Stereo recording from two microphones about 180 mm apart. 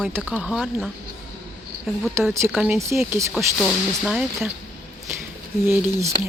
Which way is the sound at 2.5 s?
10° right (ahead or behind).